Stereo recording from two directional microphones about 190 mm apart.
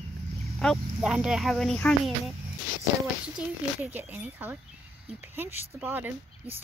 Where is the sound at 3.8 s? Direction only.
10° right (ahead or behind).